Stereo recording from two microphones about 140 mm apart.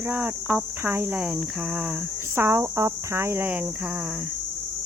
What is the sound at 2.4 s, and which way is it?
Speech, 20° right (ahead or behind).